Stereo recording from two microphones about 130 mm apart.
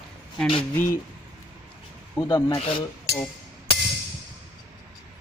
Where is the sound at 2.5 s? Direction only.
50° left (ahead or behind).